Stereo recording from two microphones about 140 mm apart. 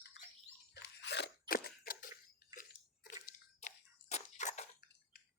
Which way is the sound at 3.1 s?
70° left (ahead or behind).